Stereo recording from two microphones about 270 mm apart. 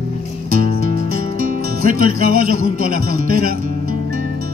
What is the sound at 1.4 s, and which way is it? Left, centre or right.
Speech, right.